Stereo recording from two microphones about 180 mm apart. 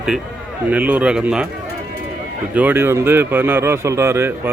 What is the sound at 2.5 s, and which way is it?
Speech, 10° right (ahead or behind).